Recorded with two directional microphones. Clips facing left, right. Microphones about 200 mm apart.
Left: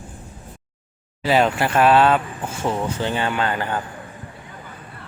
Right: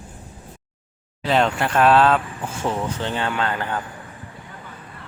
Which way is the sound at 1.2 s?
5° left (ahead or behind).